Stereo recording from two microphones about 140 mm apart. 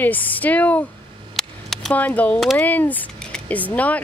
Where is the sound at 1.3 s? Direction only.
Centre (ahead or behind).